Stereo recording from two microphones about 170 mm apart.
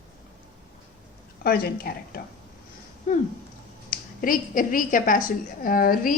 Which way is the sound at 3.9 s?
55° left (ahead or behind).